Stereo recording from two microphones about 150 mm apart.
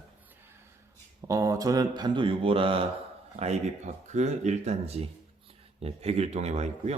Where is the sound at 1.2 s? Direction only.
20° right (ahead or behind); by 2.9 s 35° right (ahead or behind).